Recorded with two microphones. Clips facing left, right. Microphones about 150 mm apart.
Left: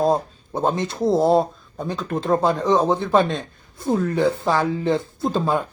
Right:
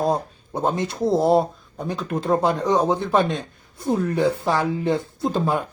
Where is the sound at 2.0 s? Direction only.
10° right (ahead or behind).